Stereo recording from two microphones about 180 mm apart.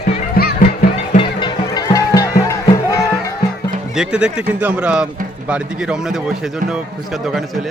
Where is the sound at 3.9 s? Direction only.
5° right (ahead or behind).